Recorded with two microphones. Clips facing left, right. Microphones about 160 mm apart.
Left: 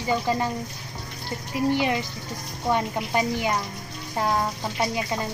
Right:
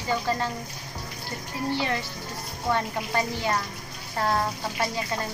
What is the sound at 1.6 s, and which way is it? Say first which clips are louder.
Speech: left 4 dB; 15° left (ahead or behind).